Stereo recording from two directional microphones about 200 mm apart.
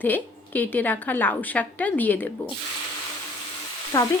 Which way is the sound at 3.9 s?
15° left (ahead or behind).